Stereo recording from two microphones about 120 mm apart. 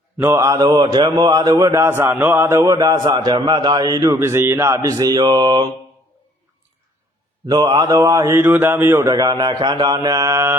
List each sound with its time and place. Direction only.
0.3 s speech: 30° right (ahead or behind)
3.0 s speech: 45° right (ahead or behind)
7.4 s speech: 35° right (ahead or behind)